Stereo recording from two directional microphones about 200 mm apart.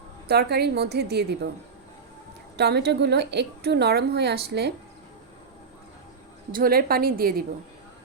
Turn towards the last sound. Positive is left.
turn(degrees=-50)  # may be behind; listen again after turning